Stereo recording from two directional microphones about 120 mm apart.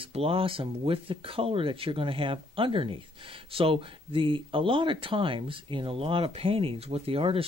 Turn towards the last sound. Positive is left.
turn(degrees=-50)  # may be behind; listen again after turning